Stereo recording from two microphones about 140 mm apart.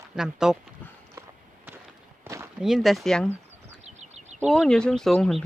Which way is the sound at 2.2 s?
20° right (ahead or behind).